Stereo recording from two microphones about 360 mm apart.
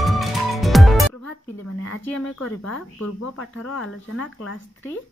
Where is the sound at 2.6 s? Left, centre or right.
Left.